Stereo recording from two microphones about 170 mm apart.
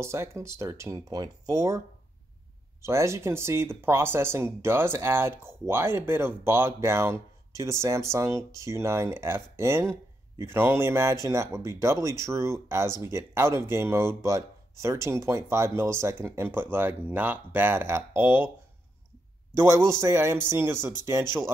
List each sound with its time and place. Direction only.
0.0 s speech: 15° right (ahead or behind)
2.8 s speech: 15° right (ahead or behind)
19.5 s a man's voice: 15° right (ahead or behind)